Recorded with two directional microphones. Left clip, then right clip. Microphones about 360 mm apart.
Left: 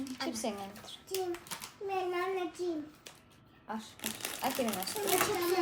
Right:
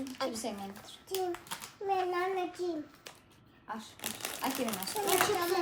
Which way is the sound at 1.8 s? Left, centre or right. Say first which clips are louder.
Right 3 dB; centre.